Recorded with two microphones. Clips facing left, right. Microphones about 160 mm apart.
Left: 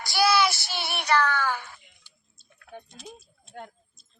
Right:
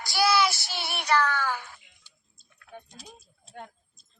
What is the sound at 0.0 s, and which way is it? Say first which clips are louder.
Child singing: left 1 dB; 65° left (ahead or behind).